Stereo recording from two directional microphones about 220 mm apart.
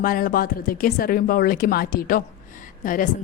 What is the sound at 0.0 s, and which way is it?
A woman's voice, 40° left (ahead or behind).